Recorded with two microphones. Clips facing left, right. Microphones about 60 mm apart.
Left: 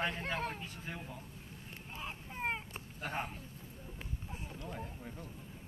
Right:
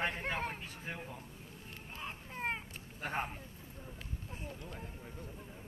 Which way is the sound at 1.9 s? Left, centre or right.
Centre.